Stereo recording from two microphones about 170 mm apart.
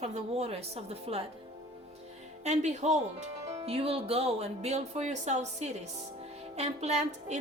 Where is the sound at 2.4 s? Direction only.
40° right (ahead or behind).